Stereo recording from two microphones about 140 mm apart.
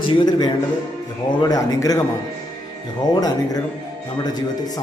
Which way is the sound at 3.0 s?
25° left (ahead or behind).